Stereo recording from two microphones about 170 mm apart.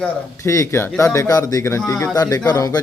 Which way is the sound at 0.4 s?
15° left (ahead or behind).